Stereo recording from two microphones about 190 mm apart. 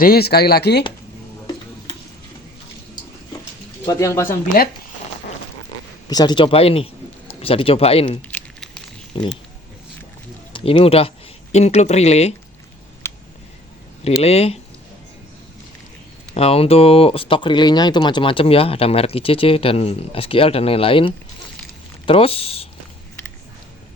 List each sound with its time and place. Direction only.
0.0 s speech: 55° left (ahead or behind)
3.8 s speech: 15° left (ahead or behind)
6.1 s speech: 20° left (ahead or behind)
8.3 s crumpling: 5° left (ahead or behind)
9.1 s speech: 25° left (ahead or behind)
10.5 s speech: 30° left (ahead or behind)
13.0 s a sound: 15° left (ahead or behind)
14.0 s speech: 35° left (ahead or behind)
16.3 s speech: 30° left (ahead or behind)